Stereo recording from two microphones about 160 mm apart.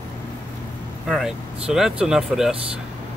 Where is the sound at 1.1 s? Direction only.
Centre (ahead or behind).